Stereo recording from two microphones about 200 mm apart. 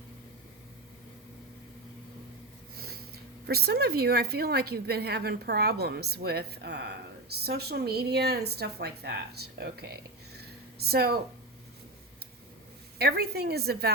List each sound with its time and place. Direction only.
2.7 s a sound: 50° right (ahead or behind)
3.4 s a woman's voice: 55° right (ahead or behind)
13.0 s a woman's voice: 50° right (ahead or behind)